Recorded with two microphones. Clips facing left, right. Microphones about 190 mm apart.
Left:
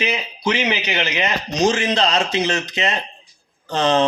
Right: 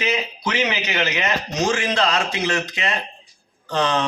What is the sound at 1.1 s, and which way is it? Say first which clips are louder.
Speech: left 1 dB; 15° left (ahead or behind).